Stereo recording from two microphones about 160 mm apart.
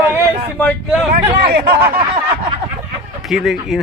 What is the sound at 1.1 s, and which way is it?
Speech, 80° right.